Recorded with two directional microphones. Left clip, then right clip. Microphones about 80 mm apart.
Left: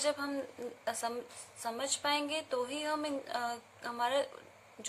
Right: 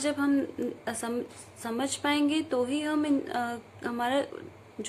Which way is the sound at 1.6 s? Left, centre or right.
Left.